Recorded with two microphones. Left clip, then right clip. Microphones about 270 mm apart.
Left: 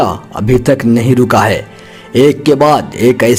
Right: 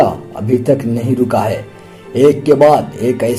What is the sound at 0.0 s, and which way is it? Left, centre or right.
Speech, left.